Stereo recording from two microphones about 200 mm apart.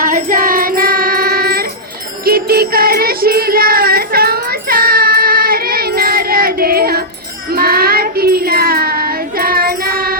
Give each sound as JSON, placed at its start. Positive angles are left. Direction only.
{"t": 0.0, "sound": "child singing", "side_deg": -45}
{"t": 2.2, "sound": "music", "side_deg": -50}
{"t": 7.5, "sound": "child singing", "side_deg": -50}